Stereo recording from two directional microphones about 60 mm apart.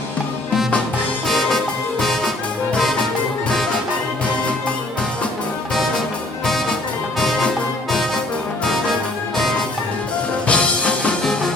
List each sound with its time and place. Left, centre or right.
1.3 s music: centre
6.4 s music: centre
8.6 s music: centre
10.4 s music: centre
11.2 s music: centre